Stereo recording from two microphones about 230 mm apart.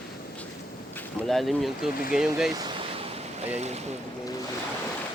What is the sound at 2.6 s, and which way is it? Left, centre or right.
Waves, centre.